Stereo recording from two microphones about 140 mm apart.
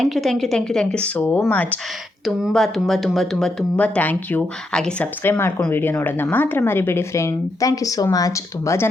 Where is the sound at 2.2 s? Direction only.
Centre (ahead or behind).